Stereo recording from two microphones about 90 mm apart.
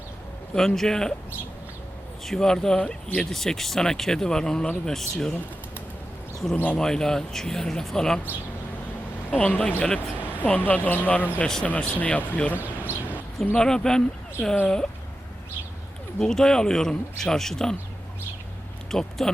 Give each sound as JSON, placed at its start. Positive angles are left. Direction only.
{"t": 0.5, "sound": "speech", "side_deg": 5}
{"t": 2.2, "sound": "speech", "side_deg": 5}
{"t": 6.6, "sound": "speech", "side_deg": 10}
{"t": 9.3, "sound": "speech", "side_deg": 15}
{"t": 11.3, "sound": "speech", "side_deg": 5}
{"t": 11.6, "sound": "speech", "side_deg": 15}
{"t": 12.5, "sound": "a sound", "side_deg": -20}
{"t": 13.1, "sound": "speech", "side_deg": 15}
{"t": 16.1, "sound": "speech", "side_deg": 5}
{"t": 18.9, "sound": "speech", "side_deg": 5}